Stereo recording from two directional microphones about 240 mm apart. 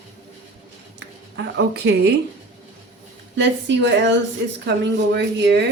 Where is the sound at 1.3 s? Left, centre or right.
Right.